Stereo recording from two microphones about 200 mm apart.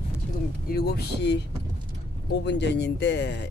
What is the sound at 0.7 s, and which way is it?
Speech, 55° left (ahead or behind).